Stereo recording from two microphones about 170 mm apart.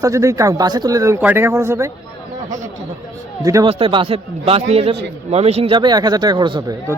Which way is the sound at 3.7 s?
35° right (ahead or behind).